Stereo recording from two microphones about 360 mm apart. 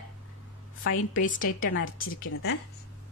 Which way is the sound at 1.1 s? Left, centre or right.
Left.